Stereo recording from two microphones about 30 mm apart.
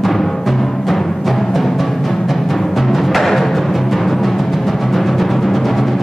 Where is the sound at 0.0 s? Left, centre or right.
Centre.